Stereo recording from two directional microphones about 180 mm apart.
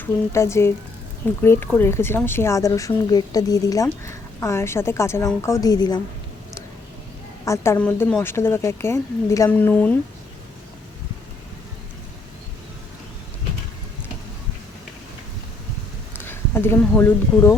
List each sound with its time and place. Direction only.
0.0 s speech: 15° left (ahead or behind)
7.4 s speech: 15° left (ahead or behind)
16.1 s speech: 10° left (ahead or behind)